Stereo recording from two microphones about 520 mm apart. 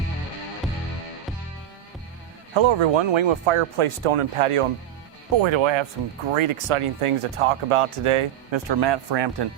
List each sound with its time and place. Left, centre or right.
2.6 s speech: right
5.4 s speech: right
8.7 s speech: right